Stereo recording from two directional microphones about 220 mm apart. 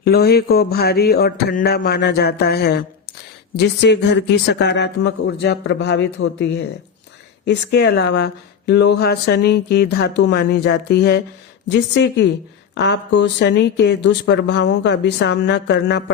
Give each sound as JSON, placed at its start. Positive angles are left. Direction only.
{"t": 0.0, "sound": "speech", "side_deg": 45}